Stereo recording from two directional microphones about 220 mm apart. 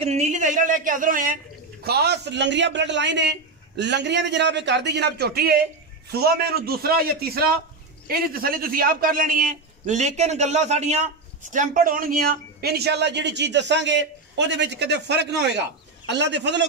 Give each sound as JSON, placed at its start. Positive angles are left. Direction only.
{"t": 0.0, "sound": "a man's voice", "side_deg": -30}